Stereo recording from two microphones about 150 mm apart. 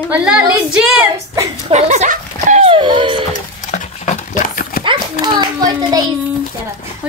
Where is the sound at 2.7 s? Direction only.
35° right (ahead or behind).